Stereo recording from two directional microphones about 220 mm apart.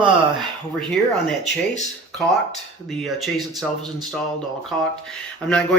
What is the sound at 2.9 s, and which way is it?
Speech, centre (ahead or behind).